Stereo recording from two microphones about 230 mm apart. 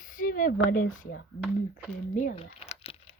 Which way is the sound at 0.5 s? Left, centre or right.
Left.